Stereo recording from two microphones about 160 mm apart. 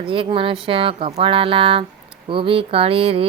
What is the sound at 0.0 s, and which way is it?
Speech, 35° right (ahead or behind).